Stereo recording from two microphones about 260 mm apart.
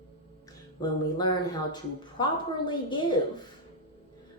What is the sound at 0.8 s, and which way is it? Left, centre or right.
Speech, centre.